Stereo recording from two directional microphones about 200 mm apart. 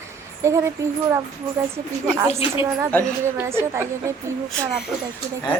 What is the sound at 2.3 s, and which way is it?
Speech, 30° left (ahead or behind).